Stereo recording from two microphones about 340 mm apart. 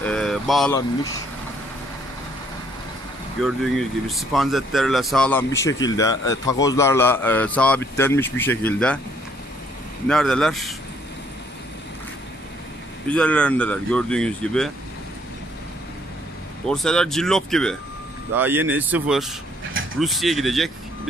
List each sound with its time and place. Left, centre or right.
0.0 s a sound: centre
3.3 s speech: centre
10.0 s speech: centre
13.1 s speech: centre
16.6 s speech: centre